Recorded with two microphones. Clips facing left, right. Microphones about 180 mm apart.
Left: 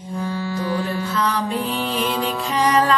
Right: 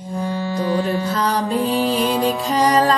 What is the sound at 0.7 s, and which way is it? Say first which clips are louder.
Music: right 4 dB; 40° right (ahead or behind).